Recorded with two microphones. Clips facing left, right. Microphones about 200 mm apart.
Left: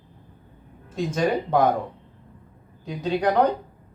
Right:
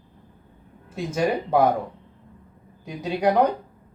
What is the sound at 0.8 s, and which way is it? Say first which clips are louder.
Speech: even; 10° right (ahead or behind).